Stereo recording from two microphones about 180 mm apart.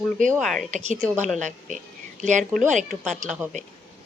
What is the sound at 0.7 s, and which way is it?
A woman's voice, 40° right (ahead or behind).